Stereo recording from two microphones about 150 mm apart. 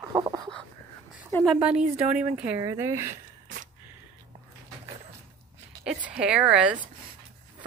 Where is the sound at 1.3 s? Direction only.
15° left (ahead or behind).